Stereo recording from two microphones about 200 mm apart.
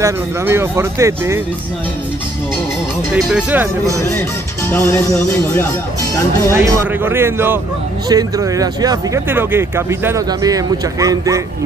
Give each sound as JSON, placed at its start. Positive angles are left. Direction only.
{"t": 0.0, "sound": "speech", "side_deg": -15}
{"t": 3.3, "sound": "speech", "side_deg": -5}
{"t": 4.6, "sound": "music", "side_deg": 10}
{"t": 6.5, "sound": "speech", "side_deg": -15}